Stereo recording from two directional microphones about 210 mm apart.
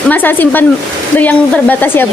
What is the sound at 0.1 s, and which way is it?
A woman's voice, 10° left (ahead or behind).